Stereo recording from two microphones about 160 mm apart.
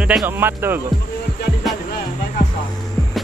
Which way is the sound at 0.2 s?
15° right (ahead or behind).